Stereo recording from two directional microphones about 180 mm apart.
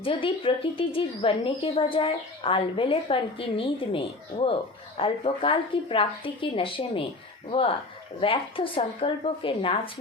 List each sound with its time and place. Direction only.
0.0 s speech: 30° left (ahead or behind)
8.2 s speech: 30° left (ahead or behind)